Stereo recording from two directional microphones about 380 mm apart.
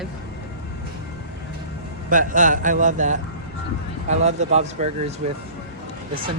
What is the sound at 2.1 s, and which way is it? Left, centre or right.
A man's voice, right.